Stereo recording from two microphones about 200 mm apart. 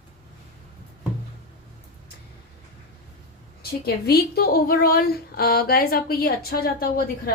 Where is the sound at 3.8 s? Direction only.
50° left (ahead or behind).